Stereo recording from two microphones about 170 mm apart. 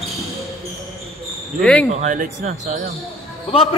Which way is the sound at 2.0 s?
50° right (ahead or behind).